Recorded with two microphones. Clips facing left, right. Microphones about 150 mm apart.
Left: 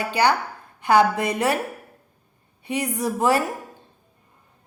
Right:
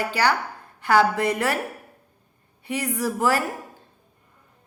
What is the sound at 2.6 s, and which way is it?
Speech, 20° left (ahead or behind).